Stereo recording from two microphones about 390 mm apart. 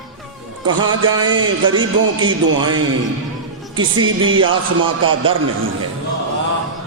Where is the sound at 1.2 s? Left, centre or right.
Centre.